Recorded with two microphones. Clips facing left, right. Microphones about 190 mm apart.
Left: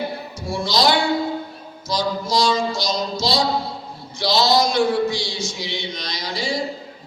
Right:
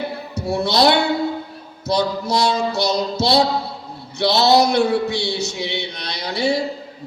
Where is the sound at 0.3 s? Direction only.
65° right (ahead or behind).